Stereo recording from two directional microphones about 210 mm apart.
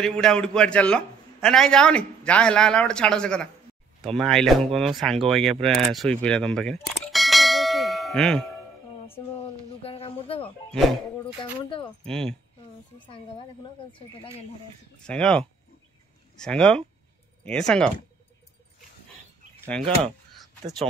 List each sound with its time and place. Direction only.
0.0 s a man's voice: 5° left (ahead or behind)
9.8 s a sound: 25° left (ahead or behind)
12.0 s a man's voice: 5° left (ahead or behind)
15.0 s a man's voice: 5° left (ahead or behind)
19.8 s speech: 25° right (ahead or behind)